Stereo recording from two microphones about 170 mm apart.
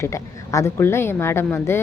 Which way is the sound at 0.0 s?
15° left (ahead or behind).